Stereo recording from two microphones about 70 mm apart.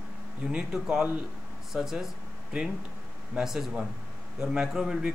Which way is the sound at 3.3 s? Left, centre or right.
Centre.